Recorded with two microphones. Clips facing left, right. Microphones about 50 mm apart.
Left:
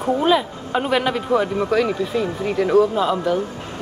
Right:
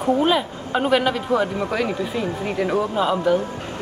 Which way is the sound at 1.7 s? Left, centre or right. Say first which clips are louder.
Left 4 dB; centre.